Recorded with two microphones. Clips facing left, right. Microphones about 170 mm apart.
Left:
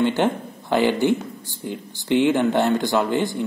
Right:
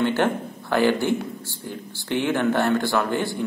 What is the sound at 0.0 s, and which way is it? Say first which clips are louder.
Speech: left 1 dB; 15° left (ahead or behind).